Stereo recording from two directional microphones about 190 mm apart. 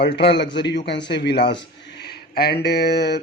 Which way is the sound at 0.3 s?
65° left (ahead or behind).